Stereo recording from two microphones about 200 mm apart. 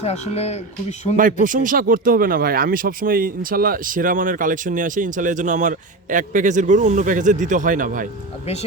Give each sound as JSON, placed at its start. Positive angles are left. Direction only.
{"t": 0.0, "sound": "speech", "side_deg": 30}
{"t": 1.1, "sound": "speech", "side_deg": -40}